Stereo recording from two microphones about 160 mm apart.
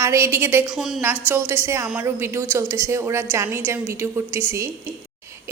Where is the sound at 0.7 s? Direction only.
Centre (ahead or behind).